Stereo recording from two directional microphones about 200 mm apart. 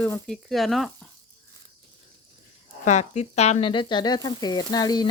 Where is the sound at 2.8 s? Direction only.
35° left (ahead or behind).